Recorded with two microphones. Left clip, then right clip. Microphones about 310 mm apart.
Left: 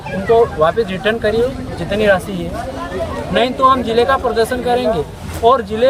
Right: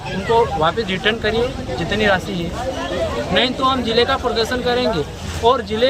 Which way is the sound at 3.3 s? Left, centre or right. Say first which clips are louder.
Left 6 dB; centre.